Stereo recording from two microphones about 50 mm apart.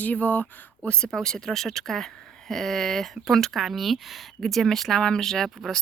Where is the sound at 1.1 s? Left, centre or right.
Centre.